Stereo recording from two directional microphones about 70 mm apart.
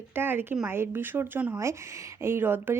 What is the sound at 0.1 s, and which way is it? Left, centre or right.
Speech, right.